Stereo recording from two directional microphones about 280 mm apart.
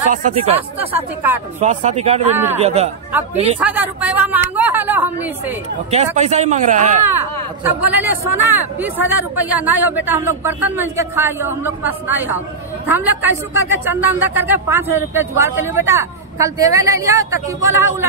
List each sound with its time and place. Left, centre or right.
0.6 s a woman's voice: centre
1.6 s a man's voice: right
3.5 s speech: centre
6.1 s a man's voice: right
7.1 s a woman's voice: centre